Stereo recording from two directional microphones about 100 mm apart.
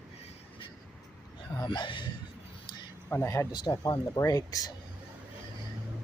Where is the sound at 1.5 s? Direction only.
50° left (ahead or behind).